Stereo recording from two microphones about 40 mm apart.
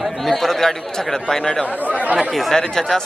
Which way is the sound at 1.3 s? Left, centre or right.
Centre.